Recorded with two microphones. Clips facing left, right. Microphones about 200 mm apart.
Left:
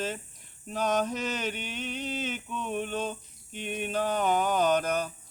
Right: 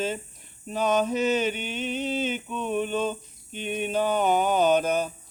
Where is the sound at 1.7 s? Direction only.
25° right (ahead or behind).